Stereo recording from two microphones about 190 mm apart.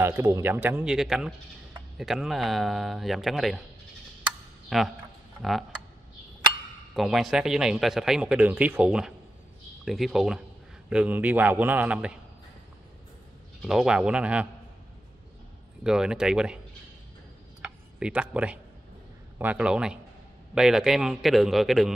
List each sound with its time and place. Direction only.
0.0 s speech: 15° right (ahead or behind)
4.6 s a man's voice: centre (ahead or behind)
7.0 s speech: centre (ahead or behind)
13.6 s speech: 5° right (ahead or behind)
15.8 s speech: 5° right (ahead or behind)
17.6 s tick-tock: 5° right (ahead or behind)
19.3 s speech: 10° right (ahead or behind)